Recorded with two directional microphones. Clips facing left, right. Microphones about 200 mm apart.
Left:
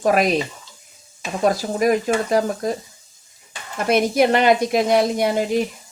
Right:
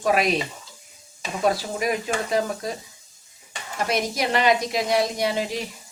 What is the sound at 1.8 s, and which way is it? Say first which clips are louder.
Speech: left 9 dB; 45° left (ahead or behind).